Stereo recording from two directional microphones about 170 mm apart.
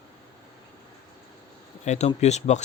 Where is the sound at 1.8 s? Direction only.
40° left (ahead or behind).